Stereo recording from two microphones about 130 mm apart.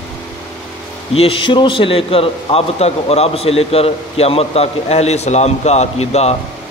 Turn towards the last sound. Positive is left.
turn(degrees=55)  # may be behind; listen again after turning